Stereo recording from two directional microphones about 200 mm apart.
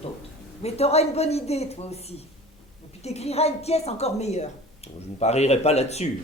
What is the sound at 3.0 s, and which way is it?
A woman's voice, 30° left (ahead or behind).